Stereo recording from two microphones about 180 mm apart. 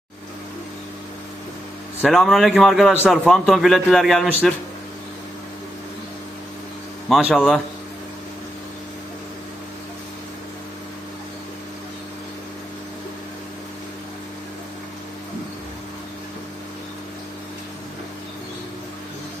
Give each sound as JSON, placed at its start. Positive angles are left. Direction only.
{"t": 2.0, "sound": "a man's voice", "side_deg": 0}
{"t": 7.1, "sound": "a man's voice", "side_deg": 0}